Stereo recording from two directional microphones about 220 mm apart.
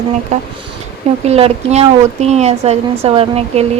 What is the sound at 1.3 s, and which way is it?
Speech, 30° right (ahead or behind).